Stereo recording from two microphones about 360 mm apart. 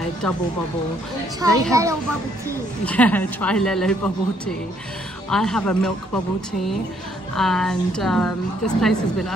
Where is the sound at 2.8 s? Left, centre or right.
Centre.